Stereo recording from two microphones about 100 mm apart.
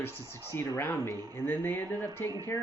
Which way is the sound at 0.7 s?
25° left (ahead or behind).